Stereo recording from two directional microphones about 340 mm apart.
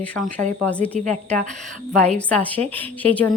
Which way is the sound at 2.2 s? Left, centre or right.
Centre.